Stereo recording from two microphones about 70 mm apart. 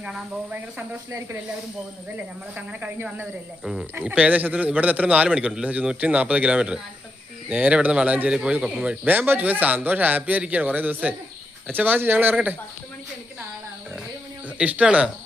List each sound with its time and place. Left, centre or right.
2.6 s a man's voice: right
3.6 s speech: centre
4.0 s a man's voice: right
9.1 s a man's voice: right
14.6 s speech: centre